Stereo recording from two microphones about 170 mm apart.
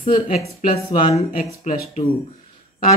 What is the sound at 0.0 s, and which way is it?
Speech, 40° left (ahead or behind).